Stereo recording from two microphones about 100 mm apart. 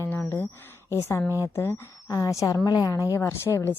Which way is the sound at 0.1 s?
20° left (ahead or behind).